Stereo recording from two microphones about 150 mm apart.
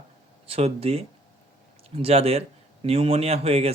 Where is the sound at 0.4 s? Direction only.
40° right (ahead or behind).